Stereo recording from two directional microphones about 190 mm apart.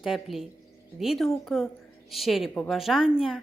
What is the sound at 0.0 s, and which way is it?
Speech, centre (ahead or behind).